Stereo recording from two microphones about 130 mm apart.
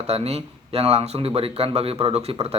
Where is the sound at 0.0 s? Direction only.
55° right (ahead or behind).